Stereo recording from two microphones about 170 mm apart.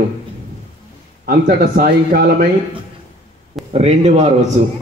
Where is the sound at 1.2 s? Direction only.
55° right (ahead or behind).